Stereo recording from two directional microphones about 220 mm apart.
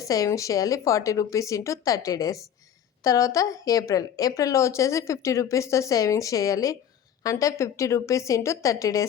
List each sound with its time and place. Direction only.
0.0 s a woman's voice: 15° left (ahead or behind)